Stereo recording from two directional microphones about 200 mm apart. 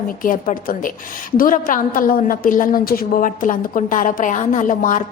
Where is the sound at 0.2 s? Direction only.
45° left (ahead or behind).